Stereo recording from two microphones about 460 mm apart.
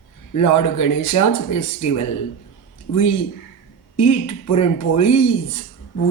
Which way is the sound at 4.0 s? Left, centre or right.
Left.